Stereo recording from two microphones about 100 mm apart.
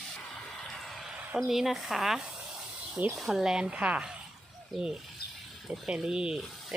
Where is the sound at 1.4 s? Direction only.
Centre (ahead or behind).